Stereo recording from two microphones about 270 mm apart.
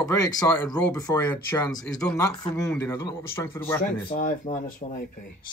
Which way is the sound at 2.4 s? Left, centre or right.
Centre.